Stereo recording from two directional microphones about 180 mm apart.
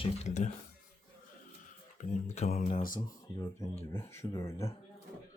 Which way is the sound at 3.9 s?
15° left (ahead or behind).